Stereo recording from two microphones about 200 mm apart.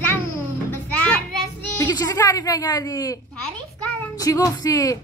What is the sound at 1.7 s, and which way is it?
Speech, 15° left (ahead or behind).